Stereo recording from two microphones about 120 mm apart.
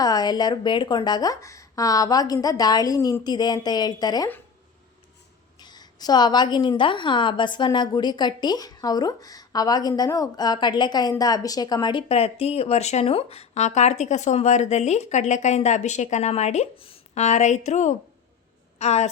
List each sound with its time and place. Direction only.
0.0 s a woman's voice: 35° left (ahead or behind)
5.5 s a woman's voice: 35° left (ahead or behind); by 17.9 s 85° left
18.8 s a woman's voice: 65° left (ahead or behind)